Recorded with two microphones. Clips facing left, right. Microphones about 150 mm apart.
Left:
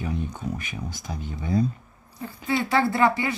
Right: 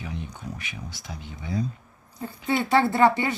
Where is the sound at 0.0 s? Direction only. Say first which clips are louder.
Left 6 dB; 45° left (ahead or behind).